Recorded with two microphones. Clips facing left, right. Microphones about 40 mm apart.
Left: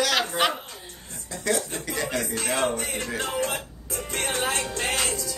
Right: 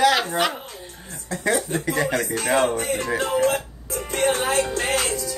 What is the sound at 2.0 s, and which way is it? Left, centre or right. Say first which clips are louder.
Speech: right 5 dB; right.